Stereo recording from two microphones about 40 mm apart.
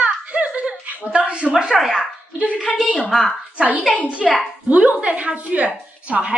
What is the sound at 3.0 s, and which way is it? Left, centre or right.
Speech, centre.